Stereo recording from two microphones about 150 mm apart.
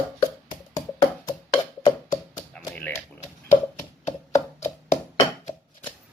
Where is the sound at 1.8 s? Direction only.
30° left (ahead or behind).